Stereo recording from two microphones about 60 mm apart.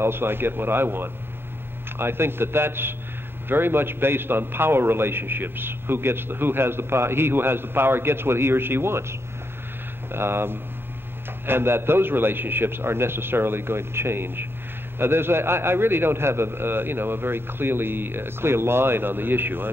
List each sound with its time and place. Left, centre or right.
0.0 s a man's voice: right
10.1 s a man's voice: right